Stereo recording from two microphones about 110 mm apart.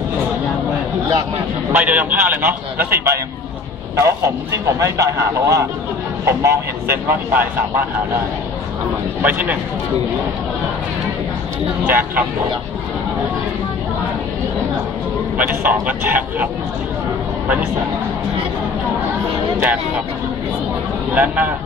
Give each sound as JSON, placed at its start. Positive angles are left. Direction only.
{"t": 1.7, "sound": "a man's voice", "side_deg": -15}
{"t": 9.2, "sound": "a man's voice", "side_deg": -15}
{"t": 11.8, "sound": "a man's voice", "side_deg": -15}
{"t": 15.3, "sound": "a man's voice", "side_deg": -15}
{"t": 21.1, "sound": "a man's voice", "side_deg": -15}